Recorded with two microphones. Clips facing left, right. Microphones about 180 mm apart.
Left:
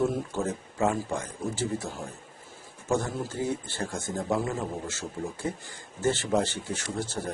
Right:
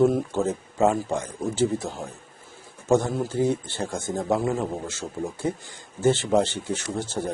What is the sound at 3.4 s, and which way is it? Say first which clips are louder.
Speech: right 7 dB; 20° right (ahead or behind).